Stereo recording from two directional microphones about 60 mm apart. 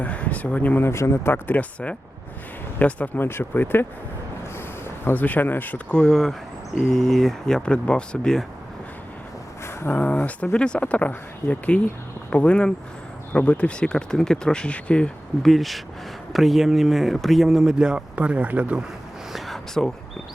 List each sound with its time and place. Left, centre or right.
0.0 s speech: left
0.9 s speech: left
1.3 s speech: left
2.7 s speech: left
3.2 s speech: left
5.0 s speech: left
5.9 s speech: centre
9.6 s a sound: left
10.0 s speech: left
15.4 s speech: centre; by 18.8 s right
19.3 s a sound: centre